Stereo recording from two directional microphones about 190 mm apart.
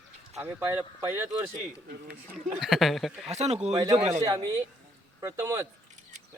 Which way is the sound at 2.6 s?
Centre (ahead or behind).